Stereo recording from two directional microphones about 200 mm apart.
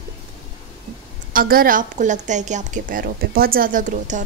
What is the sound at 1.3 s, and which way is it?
A woman's voice, 45° right (ahead or behind).